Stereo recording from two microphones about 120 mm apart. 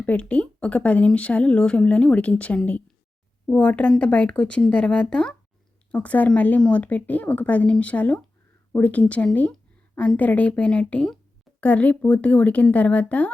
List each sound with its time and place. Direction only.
0.0 s speech: 10° left (ahead or behind)